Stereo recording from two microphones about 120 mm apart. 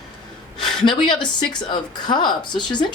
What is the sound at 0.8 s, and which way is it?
Speech, 40° left (ahead or behind).